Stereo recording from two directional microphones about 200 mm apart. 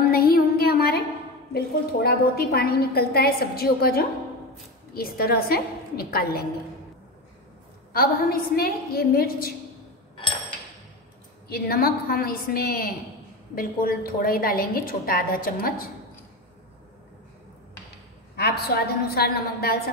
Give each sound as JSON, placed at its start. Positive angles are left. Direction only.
{"t": 0.1, "sound": "a sound", "side_deg": 50}
{"t": 1.5, "sound": "a woman's voice", "side_deg": 50}
{"t": 7.9, "sound": "a woman's voice", "side_deg": 50}
{"t": 11.4, "sound": "a woman's voice", "side_deg": 50}
{"t": 18.3, "sound": "a woman's voice", "side_deg": 50}